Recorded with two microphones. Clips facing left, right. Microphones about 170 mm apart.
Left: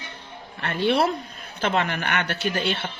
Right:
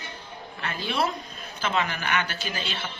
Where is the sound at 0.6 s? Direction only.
60° left (ahead or behind).